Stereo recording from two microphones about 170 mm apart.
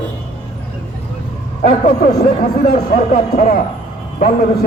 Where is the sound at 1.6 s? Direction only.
55° left (ahead or behind).